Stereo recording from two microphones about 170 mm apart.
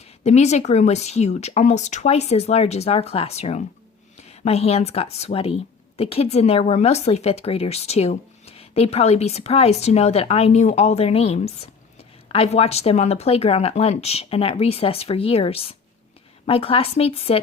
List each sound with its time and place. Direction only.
0.3 s speech: 40° left (ahead or behind)